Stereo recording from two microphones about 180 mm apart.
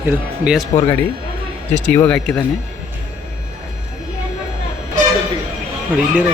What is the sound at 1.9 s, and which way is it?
Speech, 10° left (ahead or behind).